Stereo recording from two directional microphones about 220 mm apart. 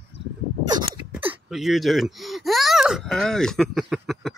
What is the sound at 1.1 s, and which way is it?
Speech, 5° right (ahead or behind).